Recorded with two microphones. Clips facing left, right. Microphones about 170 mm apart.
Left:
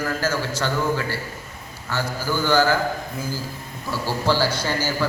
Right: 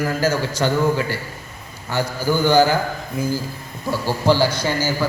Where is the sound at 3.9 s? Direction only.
15° right (ahead or behind).